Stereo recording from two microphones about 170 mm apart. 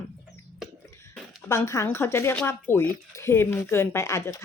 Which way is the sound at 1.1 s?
15° left (ahead or behind).